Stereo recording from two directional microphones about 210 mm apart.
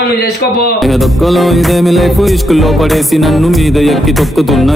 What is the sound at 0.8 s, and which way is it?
Music, centre (ahead or behind).